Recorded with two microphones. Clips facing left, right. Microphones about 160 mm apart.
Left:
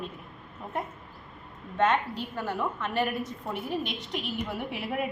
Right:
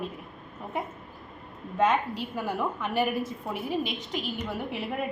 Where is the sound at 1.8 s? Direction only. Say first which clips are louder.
Right 1 dB; 10° right (ahead or behind).